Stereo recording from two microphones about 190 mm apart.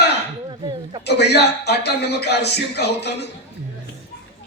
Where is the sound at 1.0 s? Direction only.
60° left (ahead or behind).